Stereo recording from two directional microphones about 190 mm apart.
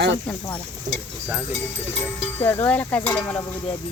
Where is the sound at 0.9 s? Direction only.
40° right (ahead or behind).